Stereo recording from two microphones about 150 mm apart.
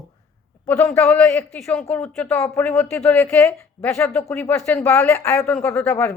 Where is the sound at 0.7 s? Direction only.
15° left (ahead or behind).